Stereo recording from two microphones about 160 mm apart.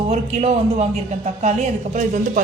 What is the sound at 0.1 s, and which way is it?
A man's voice, 40° right (ahead or behind).